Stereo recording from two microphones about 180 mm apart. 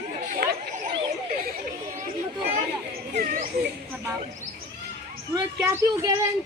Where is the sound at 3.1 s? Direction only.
50° right (ahead or behind).